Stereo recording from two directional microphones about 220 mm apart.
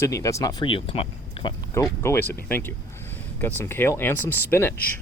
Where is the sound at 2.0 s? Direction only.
10° left (ahead or behind).